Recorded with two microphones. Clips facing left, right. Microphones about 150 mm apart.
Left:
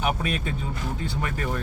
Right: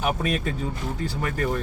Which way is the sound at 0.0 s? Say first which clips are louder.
Right 2 dB; centre (ahead or behind).